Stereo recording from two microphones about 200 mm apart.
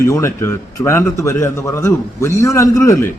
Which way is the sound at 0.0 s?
15° left (ahead or behind).